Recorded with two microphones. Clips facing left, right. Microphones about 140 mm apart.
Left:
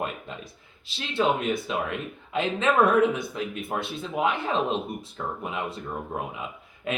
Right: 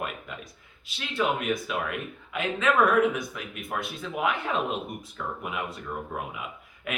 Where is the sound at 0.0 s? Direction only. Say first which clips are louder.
Left 3 dB; 30° left (ahead or behind).